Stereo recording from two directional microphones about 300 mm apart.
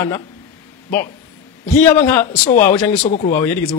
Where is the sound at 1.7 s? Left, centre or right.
Centre.